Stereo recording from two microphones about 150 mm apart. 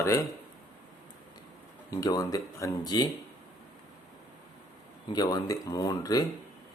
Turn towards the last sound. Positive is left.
turn(degrees=25)  # may be behind; listen again after turning